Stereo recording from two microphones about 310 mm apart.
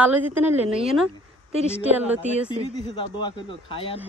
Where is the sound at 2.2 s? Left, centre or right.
Right.